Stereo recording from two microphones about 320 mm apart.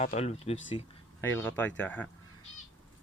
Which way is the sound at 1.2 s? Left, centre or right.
Centre.